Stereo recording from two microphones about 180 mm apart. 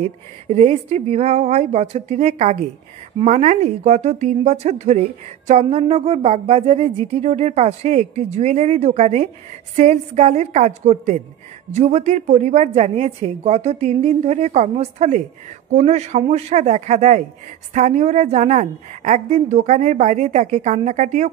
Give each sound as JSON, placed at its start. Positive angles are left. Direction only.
{"t": 0.0, "sound": "a woman's voice", "side_deg": -40}